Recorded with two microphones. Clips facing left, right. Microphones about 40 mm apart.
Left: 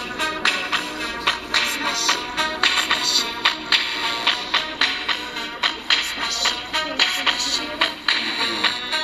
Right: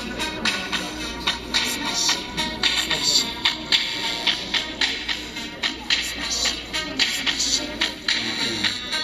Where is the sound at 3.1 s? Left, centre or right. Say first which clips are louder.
Left 2 dB; centre.